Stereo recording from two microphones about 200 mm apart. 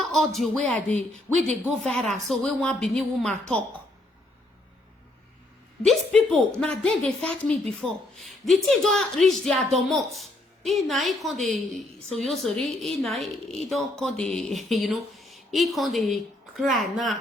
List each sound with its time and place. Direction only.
0.0 s a sound: centre (ahead or behind)
0.3 s a woman's voice: 5° left (ahead or behind)
5.8 s a woman's voice: centre (ahead or behind)